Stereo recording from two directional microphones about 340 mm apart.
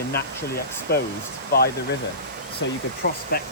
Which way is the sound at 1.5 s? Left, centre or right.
Left.